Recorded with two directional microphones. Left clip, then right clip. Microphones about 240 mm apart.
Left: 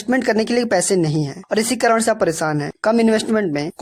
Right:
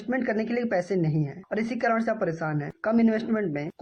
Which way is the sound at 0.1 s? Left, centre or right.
Left.